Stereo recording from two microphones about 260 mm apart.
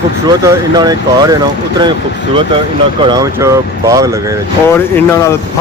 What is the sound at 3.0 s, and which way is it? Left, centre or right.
Speech, centre.